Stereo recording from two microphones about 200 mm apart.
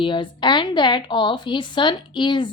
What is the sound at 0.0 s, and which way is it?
A woman's voice, 25° left (ahead or behind).